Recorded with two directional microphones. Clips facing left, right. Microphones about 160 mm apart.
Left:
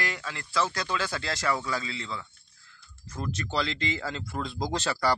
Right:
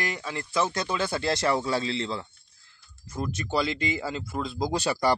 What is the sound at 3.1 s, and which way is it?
Speech, 10° right (ahead or behind).